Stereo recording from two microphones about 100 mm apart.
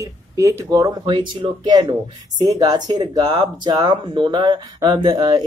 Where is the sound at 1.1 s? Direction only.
50° right (ahead or behind).